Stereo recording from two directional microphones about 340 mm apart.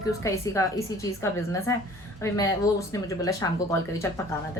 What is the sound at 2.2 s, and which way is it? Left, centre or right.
A woman's voice, centre.